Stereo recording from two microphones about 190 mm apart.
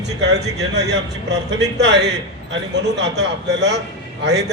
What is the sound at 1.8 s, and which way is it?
A man's voice, 65° right (ahead or behind).